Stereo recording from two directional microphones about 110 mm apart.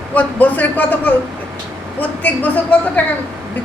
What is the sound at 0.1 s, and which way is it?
A woman's voice, 15° left (ahead or behind).